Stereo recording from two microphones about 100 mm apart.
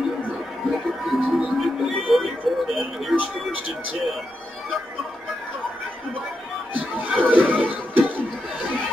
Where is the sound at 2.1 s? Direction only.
Centre (ahead or behind).